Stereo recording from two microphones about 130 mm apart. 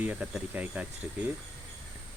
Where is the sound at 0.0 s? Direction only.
10° right (ahead or behind).